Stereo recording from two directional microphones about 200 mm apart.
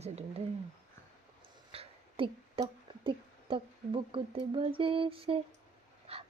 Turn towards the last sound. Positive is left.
turn(degrees=-30)  # may be behind; listen again after turning